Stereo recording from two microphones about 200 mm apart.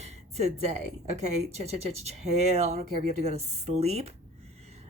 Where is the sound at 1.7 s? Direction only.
30° right (ahead or behind).